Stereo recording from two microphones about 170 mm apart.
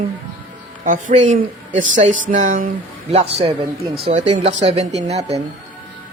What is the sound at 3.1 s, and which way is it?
Speech, 35° right (ahead or behind).